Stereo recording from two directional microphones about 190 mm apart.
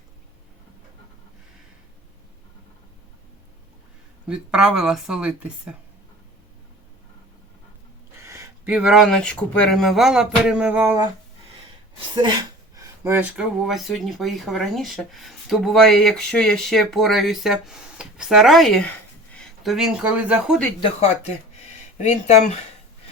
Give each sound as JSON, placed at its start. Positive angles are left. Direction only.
{"t": 4.3, "sound": "speech", "side_deg": -5}
{"t": 8.2, "sound": "speech", "side_deg": -15}
{"t": 11.9, "sound": "speech", "side_deg": -25}
{"t": 20.8, "sound": "speech", "side_deg": 35}